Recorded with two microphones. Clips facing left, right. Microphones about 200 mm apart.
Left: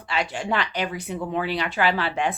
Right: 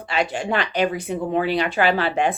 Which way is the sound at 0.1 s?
55° right (ahead or behind).